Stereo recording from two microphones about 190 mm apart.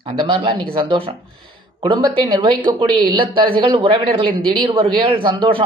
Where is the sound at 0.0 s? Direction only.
25° right (ahead or behind).